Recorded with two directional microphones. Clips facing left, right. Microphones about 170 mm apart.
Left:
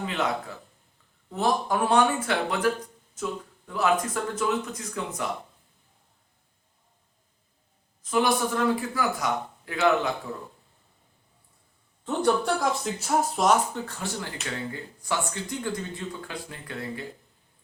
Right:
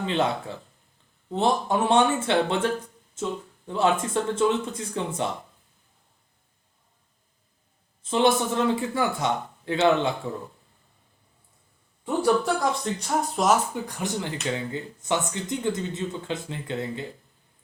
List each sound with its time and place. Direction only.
0.0 s speech: 30° right (ahead or behind)
8.0 s speech: 25° right (ahead or behind)
12.0 s speech: centre (ahead or behind)
13.8 s speech: 15° right (ahead or behind)